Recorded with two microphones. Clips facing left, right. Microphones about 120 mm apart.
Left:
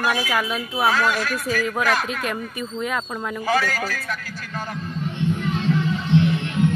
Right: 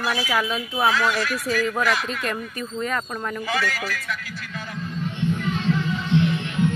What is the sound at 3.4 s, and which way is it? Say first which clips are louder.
Speech: left 6 dB; 45° left (ahead or behind).